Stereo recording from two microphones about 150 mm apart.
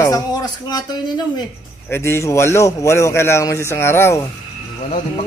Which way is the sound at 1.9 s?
15° left (ahead or behind).